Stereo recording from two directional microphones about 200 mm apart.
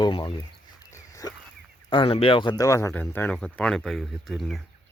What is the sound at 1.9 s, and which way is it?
Speech, 25° left (ahead or behind).